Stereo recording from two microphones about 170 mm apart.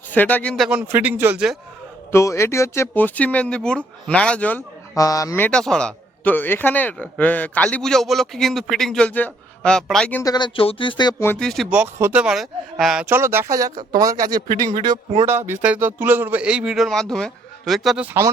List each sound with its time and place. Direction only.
0.1 s speech: 10° left (ahead or behind)
0.5 s a man's voice: 5° right (ahead or behind)
2.1 s speech: 15° left (ahead or behind)
4.9 s speech: 20° left (ahead or behind)
5.5 s a man's voice: 5° left (ahead or behind)
10.2 s speech: 25° left (ahead or behind)
11.3 s a man's voice: centre (ahead or behind)
11.7 s a man's voice: 10° right (ahead or behind); by 15.3 s 30° right (ahead or behind)
15.3 s a man's voice: 15° right (ahead or behind)